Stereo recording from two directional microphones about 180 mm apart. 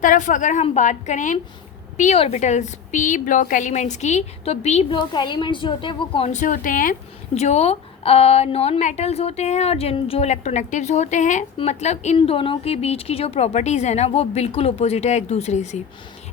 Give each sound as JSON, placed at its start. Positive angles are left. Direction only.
{"t": 0.0, "sound": "a woman's voice", "side_deg": 45}
{"t": 4.9, "sound": "a woman's voice", "side_deg": 25}
{"t": 7.3, "sound": "speech", "side_deg": 40}